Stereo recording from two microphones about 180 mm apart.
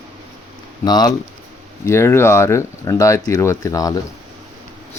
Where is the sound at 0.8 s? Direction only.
20° left (ahead or behind).